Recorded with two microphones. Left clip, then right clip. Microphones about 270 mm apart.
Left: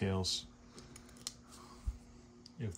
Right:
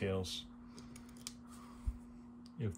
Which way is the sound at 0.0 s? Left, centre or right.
Centre.